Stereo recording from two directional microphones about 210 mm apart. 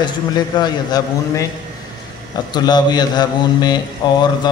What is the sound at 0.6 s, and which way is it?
Speech, 15° left (ahead or behind).